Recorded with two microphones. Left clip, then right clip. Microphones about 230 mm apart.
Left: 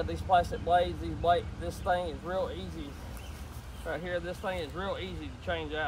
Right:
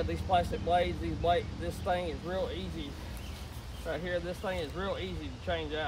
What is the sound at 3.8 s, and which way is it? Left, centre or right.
Speech, centre.